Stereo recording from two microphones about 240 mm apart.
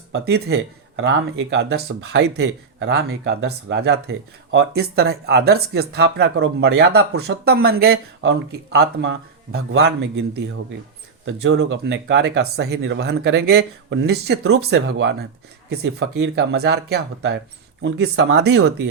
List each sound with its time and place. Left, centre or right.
0.1 s speech: right